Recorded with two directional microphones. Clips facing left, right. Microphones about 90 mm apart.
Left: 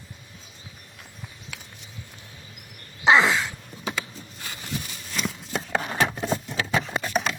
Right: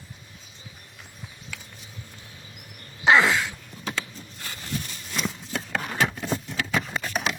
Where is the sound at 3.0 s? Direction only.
20° left (ahead or behind).